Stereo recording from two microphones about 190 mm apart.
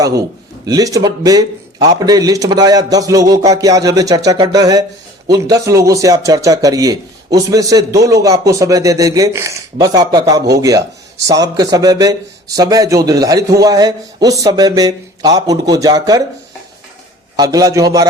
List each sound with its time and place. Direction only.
0.6 s a man's voice: 20° right (ahead or behind)
17.3 s a man's voice: 20° right (ahead or behind)